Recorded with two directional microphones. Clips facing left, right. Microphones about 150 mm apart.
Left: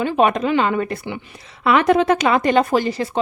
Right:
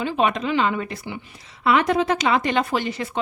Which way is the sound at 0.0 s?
50° left (ahead or behind).